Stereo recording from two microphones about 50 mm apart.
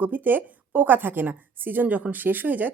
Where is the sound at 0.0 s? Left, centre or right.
Right.